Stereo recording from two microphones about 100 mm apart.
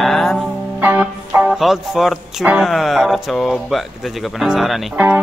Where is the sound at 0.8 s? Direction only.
15° right (ahead or behind).